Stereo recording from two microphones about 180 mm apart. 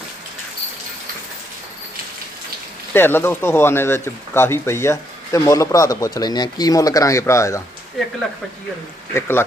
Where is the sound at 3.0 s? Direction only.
10° left (ahead or behind).